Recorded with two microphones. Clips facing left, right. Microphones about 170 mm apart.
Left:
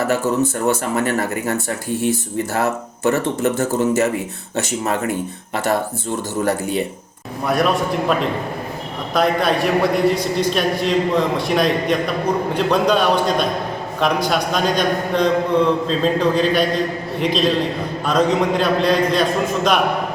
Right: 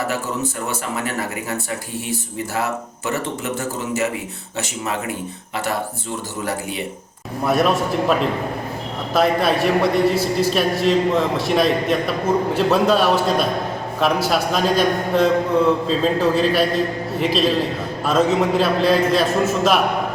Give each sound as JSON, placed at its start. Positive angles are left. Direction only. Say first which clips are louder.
{"t": 0.7, "sound": "speech", "louder": "left 6 dB", "side_deg": 50}
{"t": 2.6, "sound": "speech", "louder": "left 2 dB", "side_deg": 45}
{"t": 7.4, "sound": "a man's voice", "louder": "even", "side_deg": 0}